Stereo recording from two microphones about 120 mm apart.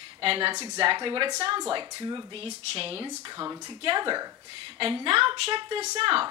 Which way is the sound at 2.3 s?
50° right (ahead or behind).